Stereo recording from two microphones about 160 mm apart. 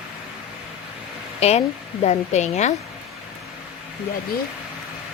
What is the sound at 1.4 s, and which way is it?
A woman's voice, 40° left (ahead or behind).